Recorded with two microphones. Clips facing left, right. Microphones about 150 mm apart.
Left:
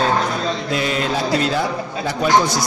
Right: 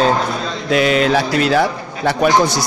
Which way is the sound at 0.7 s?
80° right.